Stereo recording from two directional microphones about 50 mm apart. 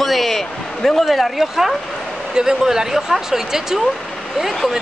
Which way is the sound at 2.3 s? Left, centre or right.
Centre.